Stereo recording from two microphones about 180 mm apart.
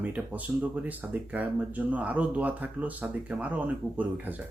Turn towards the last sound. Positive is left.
turn(degrees=-10)  # may be behind; listen again after turning